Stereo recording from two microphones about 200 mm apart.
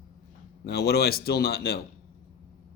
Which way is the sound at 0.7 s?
55° left (ahead or behind).